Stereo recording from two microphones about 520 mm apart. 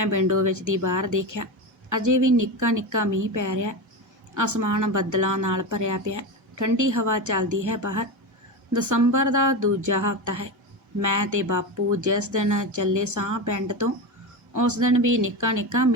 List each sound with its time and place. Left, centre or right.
0.0 s a woman's voice: right